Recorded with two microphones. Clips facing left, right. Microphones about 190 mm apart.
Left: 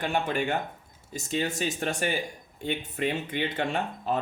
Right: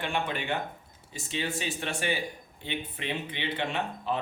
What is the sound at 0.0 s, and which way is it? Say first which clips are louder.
Speech: left 4 dB; 45° left (ahead or behind).